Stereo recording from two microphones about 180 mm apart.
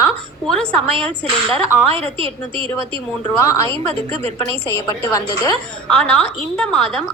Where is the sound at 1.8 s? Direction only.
35° right (ahead or behind).